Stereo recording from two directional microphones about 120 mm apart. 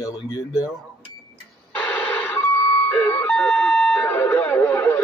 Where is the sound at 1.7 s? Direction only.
10° left (ahead or behind).